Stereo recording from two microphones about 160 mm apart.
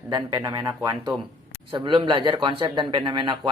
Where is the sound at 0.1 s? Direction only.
25° right (ahead or behind).